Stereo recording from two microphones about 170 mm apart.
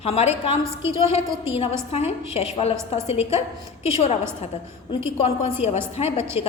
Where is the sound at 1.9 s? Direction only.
40° left (ahead or behind).